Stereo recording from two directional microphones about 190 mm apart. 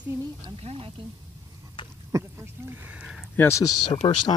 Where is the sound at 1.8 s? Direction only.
25° left (ahead or behind).